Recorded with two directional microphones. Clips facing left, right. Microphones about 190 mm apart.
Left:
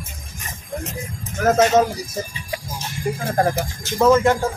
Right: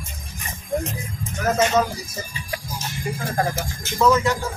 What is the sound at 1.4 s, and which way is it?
Speech, 50° left (ahead or behind).